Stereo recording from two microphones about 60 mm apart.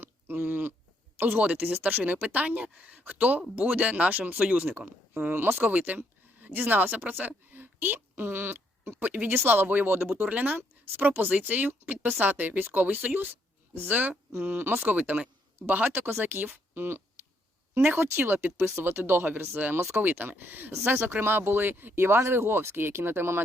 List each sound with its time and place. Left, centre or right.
0.0 s a sound: right
1.2 s speech: right
5.3 s speech: right
9.0 s speech: right